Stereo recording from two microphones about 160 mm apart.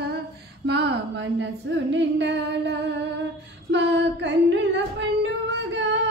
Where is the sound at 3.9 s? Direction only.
90° right.